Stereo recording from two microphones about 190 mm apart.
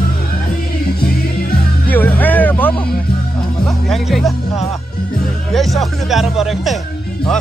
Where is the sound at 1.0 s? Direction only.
55° left (ahead or behind).